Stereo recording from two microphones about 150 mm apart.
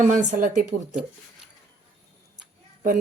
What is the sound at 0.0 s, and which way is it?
Speech, 55° right (ahead or behind).